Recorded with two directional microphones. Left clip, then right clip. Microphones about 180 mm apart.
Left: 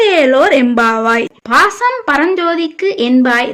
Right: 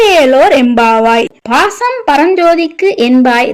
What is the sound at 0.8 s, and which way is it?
Speech, 15° right (ahead or behind).